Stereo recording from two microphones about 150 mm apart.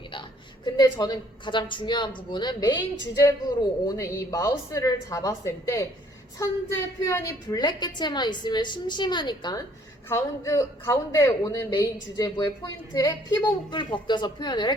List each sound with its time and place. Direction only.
0.1 s a woman's voice: 30° left (ahead or behind)
10.1 s speech: 20° left (ahead or behind)